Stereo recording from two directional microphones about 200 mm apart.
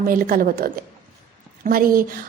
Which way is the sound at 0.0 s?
45° right (ahead or behind).